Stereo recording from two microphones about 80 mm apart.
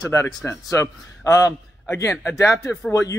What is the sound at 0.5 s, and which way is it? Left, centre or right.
A man's voice, left.